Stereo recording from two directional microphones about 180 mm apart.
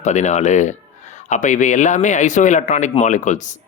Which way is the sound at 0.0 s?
40° left (ahead or behind).